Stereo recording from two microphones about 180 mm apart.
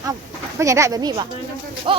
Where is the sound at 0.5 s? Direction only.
15° right (ahead or behind).